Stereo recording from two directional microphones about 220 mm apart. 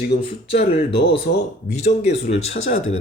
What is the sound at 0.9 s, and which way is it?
Speech, 45° left (ahead or behind).